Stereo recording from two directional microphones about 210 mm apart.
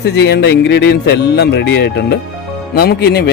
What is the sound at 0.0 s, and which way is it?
Speech, 55° left (ahead or behind).